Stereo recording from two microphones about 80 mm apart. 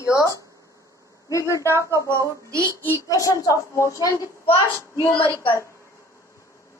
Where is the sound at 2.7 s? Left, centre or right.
Left.